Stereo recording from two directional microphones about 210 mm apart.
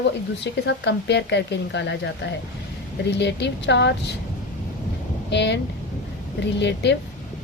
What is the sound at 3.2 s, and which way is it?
Speech, 55° left (ahead or behind).